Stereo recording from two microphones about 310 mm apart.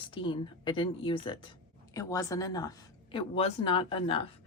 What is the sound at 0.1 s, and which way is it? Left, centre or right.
Speech, centre.